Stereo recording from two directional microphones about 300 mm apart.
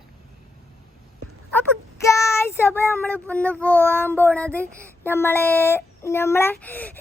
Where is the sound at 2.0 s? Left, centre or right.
Centre.